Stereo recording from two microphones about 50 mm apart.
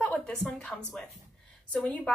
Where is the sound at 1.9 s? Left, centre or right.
Left.